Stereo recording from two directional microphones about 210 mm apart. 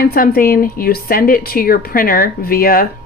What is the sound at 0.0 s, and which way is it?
Speech, 45° left (ahead or behind).